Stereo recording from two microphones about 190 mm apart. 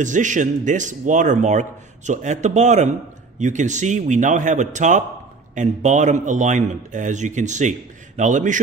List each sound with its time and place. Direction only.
0.0 s speech: 40° right (ahead or behind)